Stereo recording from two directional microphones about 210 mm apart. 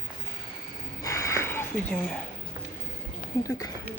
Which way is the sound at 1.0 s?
15° left (ahead or behind).